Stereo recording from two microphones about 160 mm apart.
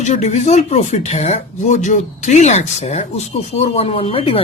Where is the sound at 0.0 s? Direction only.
45° left (ahead or behind).